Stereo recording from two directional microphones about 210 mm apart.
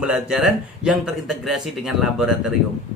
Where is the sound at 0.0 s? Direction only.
5° right (ahead or behind).